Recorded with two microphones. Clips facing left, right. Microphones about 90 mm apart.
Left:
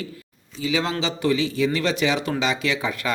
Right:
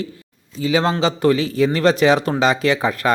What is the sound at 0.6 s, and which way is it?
Speech, 40° right (ahead or behind).